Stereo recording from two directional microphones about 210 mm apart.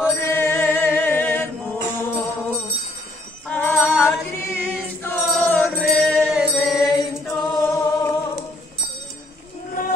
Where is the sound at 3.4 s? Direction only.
10° left (ahead or behind).